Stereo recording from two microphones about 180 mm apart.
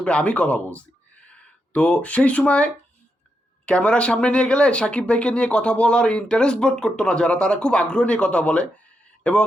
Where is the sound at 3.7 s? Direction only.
5° left (ahead or behind).